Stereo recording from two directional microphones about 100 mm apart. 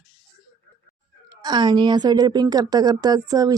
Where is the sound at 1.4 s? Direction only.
45° right (ahead or behind).